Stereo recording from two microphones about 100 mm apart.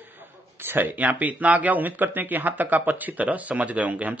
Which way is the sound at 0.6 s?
20° right (ahead or behind).